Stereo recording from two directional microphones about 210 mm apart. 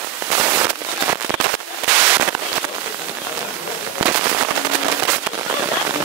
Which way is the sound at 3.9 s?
10° right (ahead or behind).